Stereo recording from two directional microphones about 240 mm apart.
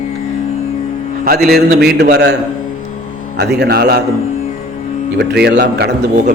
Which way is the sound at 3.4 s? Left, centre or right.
Right.